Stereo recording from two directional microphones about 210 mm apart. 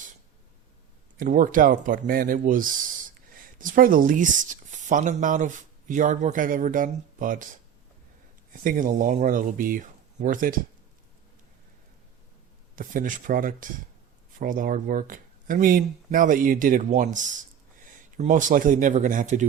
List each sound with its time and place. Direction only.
1.1 s speech: 40° right (ahead or behind)
8.6 s speech: 40° right (ahead or behind)
12.7 s speech: 40° right (ahead or behind)